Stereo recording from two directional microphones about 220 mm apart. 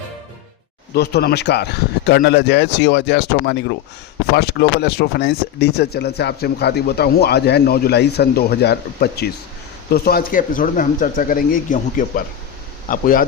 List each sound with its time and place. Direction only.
0.9 s speech: 45° left (ahead or behind)